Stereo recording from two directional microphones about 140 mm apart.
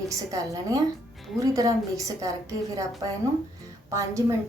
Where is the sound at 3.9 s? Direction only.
20° right (ahead or behind).